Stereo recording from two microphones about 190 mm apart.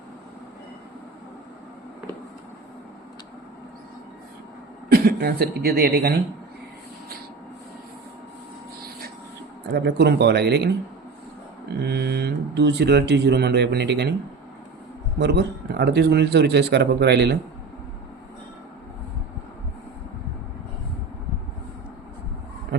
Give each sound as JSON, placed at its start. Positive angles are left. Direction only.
{"t": 4.9, "sound": "speech", "side_deg": -55}
{"t": 9.7, "sound": "speech", "side_deg": -60}
{"t": 11.8, "sound": "speech", "side_deg": -60}
{"t": 15.2, "sound": "speech", "side_deg": -60}